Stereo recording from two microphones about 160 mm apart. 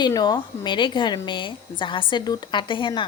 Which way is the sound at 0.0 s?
25° left (ahead or behind).